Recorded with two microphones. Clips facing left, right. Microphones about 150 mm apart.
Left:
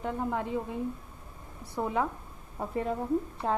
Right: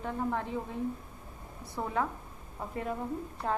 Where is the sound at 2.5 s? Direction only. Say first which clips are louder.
Left 5 dB; 35° left (ahead or behind).